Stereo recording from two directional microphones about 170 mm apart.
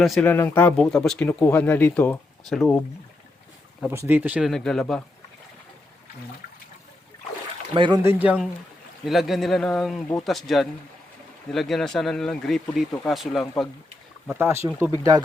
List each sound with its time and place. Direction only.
0.0 s speech: centre (ahead or behind)
0.3 s speech: 15° left (ahead or behind)
3.8 s speech: 10° right (ahead or behind)
7.7 s speech: 25° right (ahead or behind)
8.0 s speech: 10° right (ahead or behind)
14.3 s speech: 15° right (ahead or behind)